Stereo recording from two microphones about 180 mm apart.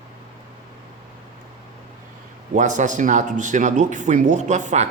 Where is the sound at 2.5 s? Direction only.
45° right (ahead or behind).